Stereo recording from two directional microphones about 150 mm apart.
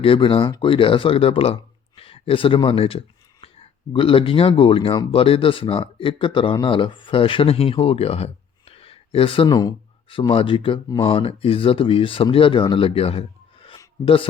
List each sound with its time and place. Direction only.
0.0 s speech: 35° left (ahead or behind)
3.4 s a sound: 40° left (ahead or behind)
3.9 s speech: 35° left (ahead or behind)